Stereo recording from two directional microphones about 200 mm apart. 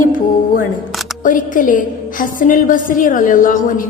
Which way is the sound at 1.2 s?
40° left (ahead or behind).